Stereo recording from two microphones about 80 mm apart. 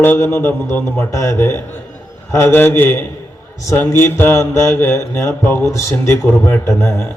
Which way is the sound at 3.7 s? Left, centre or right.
Left.